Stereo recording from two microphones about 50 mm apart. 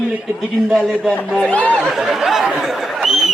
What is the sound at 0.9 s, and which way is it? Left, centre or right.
Speech, centre.